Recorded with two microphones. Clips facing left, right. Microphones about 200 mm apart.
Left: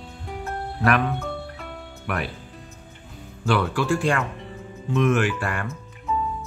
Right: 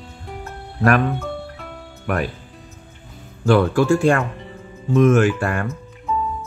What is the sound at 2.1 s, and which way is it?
Speech, 45° right (ahead or behind).